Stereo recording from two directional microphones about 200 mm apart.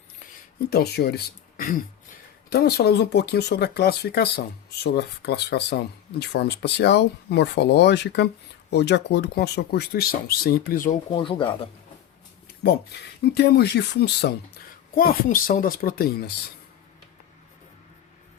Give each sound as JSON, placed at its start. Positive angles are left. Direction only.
{"t": 0.7, "sound": "a woman's voice", "side_deg": 50}
{"t": 11.1, "sound": "speech", "side_deg": 25}
{"t": 13.2, "sound": "a woman's voice", "side_deg": 55}